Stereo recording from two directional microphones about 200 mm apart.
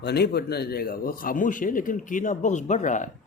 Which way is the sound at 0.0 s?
55° left (ahead or behind).